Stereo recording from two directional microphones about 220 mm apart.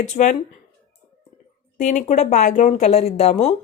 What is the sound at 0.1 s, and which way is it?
Speech, 30° left (ahead or behind).